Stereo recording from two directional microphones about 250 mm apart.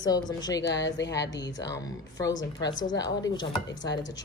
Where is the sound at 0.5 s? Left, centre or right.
Left.